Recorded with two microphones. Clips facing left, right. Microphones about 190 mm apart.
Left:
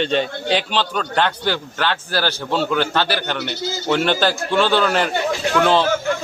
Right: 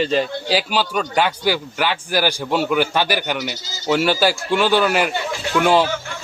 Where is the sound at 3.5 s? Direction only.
60° left (ahead or behind).